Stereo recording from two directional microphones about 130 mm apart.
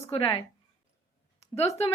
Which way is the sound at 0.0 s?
45° left (ahead or behind).